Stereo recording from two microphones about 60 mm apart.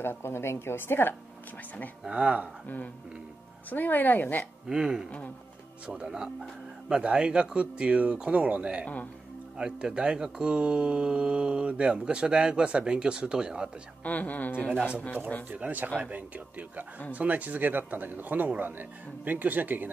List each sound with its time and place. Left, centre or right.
0.0 s a woman's voice: left
2.0 s speech: centre
3.7 s speech: left
4.6 s speech: centre
8.8 s speech: left
9.6 s speech: centre
14.0 s speech: left
15.5 s speech: right